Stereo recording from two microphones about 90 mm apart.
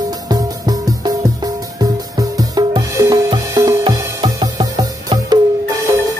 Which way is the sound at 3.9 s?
45° right (ahead or behind).